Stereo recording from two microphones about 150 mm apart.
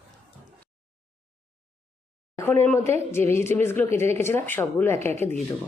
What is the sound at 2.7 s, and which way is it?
A woman's voice, 15° left (ahead or behind).